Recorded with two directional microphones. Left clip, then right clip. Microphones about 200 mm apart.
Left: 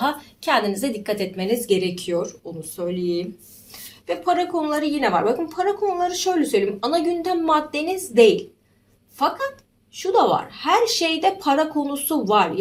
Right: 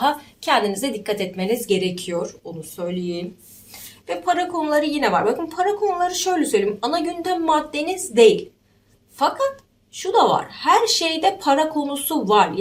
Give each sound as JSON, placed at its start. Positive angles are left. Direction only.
{"t": 0.0, "sound": "a woman's voice", "side_deg": -10}
{"t": 10.0, "sound": "a woman's voice", "side_deg": -20}